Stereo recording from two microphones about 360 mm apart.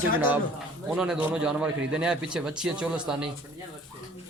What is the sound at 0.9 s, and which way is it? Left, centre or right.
Speech, centre.